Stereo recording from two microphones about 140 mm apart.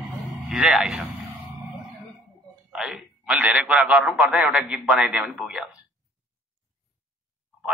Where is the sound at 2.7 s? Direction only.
5° right (ahead or behind).